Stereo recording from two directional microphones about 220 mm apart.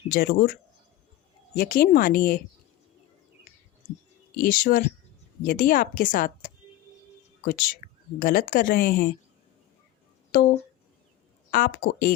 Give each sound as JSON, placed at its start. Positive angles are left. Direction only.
{"t": 0.1, "sound": "a woman's voice", "side_deg": 40}
{"t": 1.5, "sound": "a woman's voice", "side_deg": 40}
{"t": 4.4, "sound": "a woman's voice", "side_deg": 40}
{"t": 10.3, "sound": "a woman's voice", "side_deg": 45}
{"t": 11.5, "sound": "a woman's voice", "side_deg": 40}